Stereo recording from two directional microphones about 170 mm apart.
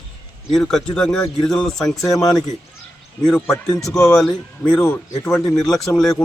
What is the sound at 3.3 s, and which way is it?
A man's voice, 5° left (ahead or behind).